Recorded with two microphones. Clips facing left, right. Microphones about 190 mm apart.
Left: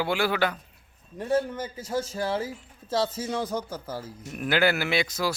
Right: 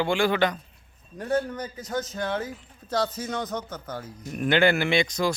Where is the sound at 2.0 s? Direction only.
30° left (ahead or behind).